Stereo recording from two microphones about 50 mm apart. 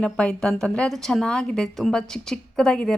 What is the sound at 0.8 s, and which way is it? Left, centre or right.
A woman's voice, centre.